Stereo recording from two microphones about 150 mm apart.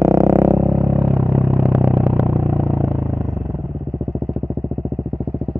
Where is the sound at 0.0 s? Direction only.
20° right (ahead or behind).